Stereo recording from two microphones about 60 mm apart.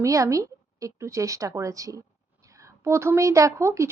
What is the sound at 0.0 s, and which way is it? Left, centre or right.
A woman's voice, right.